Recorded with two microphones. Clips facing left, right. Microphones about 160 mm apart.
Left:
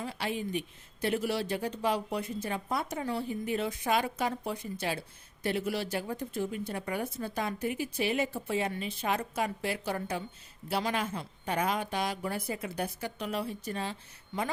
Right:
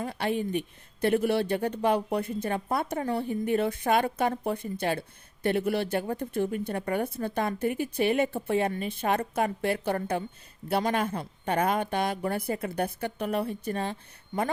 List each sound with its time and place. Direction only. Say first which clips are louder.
0.0 s a woman's voice: right 5 dB; 55° right (ahead or behind)